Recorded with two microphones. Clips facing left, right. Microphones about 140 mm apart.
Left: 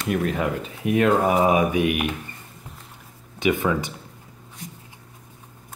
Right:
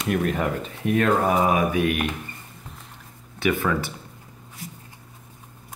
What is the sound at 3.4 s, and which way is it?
Speech, 20° left (ahead or behind).